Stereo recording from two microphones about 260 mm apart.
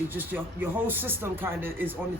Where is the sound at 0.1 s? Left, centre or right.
Centre.